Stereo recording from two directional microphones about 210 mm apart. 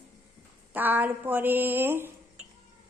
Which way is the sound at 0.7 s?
10° right (ahead or behind).